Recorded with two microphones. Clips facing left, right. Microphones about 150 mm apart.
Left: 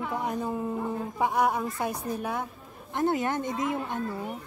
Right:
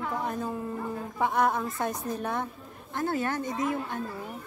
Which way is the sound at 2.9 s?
20° left (ahead or behind).